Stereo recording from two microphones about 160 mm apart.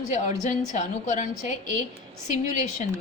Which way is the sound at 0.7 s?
50° left (ahead or behind).